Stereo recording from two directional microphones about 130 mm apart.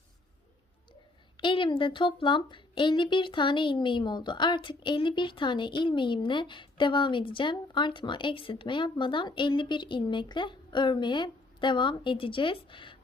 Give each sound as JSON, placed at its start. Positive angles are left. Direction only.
{"t": 1.4, "sound": "speech", "side_deg": 40}